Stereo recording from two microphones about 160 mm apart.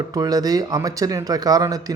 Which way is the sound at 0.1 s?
25° right (ahead or behind).